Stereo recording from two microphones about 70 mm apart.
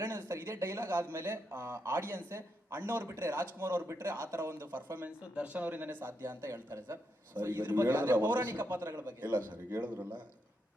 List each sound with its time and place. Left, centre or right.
0.0 s speech: right
7.3 s a man's voice: right